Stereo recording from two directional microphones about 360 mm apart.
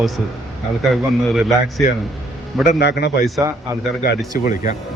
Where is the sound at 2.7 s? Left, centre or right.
Left.